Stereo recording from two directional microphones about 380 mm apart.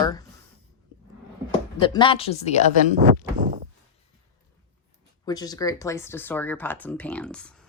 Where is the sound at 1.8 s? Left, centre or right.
Centre.